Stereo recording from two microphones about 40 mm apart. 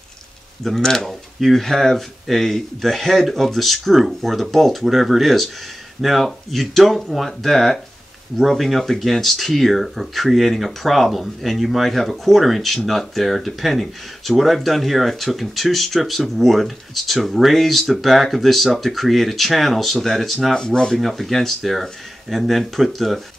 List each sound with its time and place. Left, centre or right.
0.7 s speech: centre
20.5 s speech: centre
21.0 s speech: centre